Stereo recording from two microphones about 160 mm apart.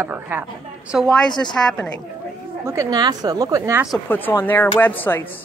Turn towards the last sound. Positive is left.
turn(degrees=10)  # may be behind; listen again after turning